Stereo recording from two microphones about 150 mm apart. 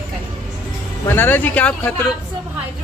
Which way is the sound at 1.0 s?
15° left (ahead or behind).